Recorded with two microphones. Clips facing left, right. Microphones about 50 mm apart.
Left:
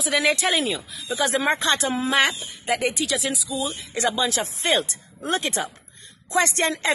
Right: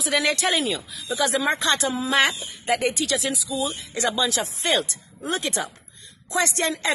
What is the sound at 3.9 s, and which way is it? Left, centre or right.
Speech, left.